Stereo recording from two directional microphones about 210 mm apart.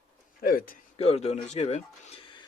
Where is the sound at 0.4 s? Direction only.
45° left (ahead or behind).